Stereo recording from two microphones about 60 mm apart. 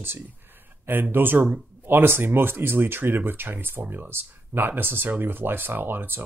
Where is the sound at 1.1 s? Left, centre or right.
Right.